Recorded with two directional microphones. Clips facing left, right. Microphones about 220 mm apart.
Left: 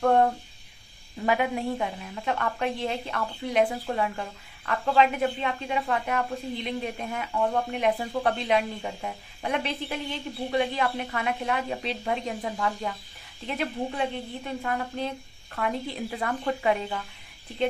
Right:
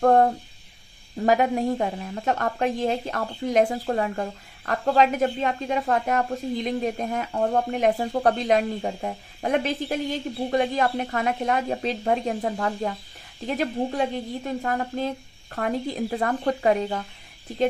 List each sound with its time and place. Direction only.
1.2 s a woman's voice: 40° right (ahead or behind)